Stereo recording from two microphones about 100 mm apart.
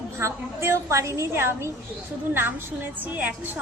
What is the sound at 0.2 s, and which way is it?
A woman's voice, 30° right (ahead or behind).